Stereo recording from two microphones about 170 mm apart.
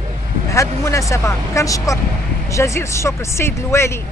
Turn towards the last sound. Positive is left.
turn(degrees=15)  # may be behind; listen again after turning